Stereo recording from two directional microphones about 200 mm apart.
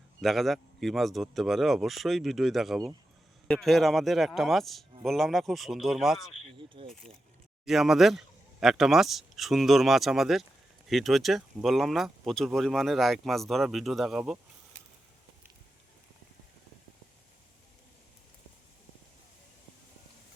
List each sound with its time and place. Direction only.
0.2 s speech: centre (ahead or behind)
6.8 s speech: 25° right (ahead or behind)
7.6 s speech: centre (ahead or behind)